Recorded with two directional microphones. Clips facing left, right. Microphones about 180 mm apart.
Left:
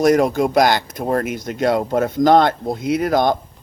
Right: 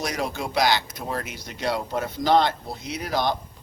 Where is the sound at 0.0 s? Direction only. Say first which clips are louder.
Left 14 dB; 50° left (ahead or behind).